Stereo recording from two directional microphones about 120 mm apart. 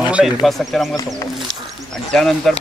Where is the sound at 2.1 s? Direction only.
5° left (ahead or behind).